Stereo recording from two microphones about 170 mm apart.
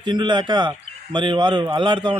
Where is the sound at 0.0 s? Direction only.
25° right (ahead or behind).